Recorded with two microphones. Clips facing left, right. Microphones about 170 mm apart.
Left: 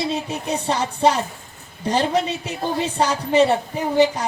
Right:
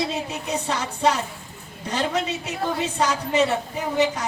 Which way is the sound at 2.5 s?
30° left (ahead or behind).